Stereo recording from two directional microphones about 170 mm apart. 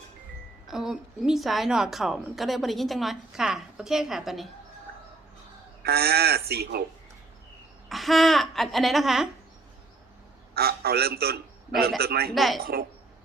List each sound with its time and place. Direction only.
0.7 s a woman's voice: 5° right (ahead or behind)
5.8 s speech: 65° right (ahead or behind)
7.9 s a woman's voice: centre (ahead or behind)
10.5 s speech: 65° right (ahead or behind)
12.3 s a woman's voice: centre (ahead or behind)